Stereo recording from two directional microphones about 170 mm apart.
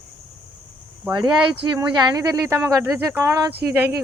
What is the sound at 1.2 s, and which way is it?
Speech, 25° right (ahead or behind).